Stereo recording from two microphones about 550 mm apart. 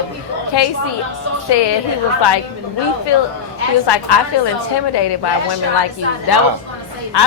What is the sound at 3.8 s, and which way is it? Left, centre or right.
Speech, left.